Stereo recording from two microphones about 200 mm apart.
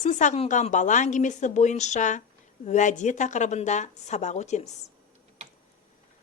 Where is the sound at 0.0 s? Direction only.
40° left (ahead or behind).